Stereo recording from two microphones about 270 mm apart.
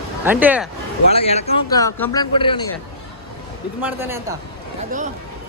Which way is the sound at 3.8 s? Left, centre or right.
Centre.